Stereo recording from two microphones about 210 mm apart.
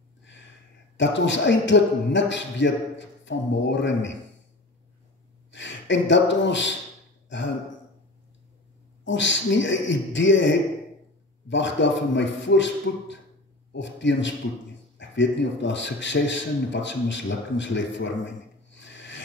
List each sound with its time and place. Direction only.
0.9 s a man's voice: 60° left (ahead or behind)
5.5 s speech: 60° left (ahead or behind)
9.0 s a man's voice: 60° left (ahead or behind)